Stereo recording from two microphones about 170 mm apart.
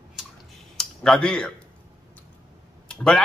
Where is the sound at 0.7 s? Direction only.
5° left (ahead or behind).